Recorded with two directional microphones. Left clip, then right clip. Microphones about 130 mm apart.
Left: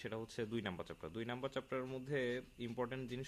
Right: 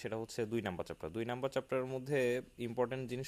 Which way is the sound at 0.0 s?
40° right (ahead or behind).